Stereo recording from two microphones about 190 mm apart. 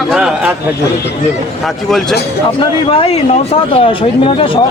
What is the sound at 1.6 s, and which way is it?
Speech, centre (ahead or behind).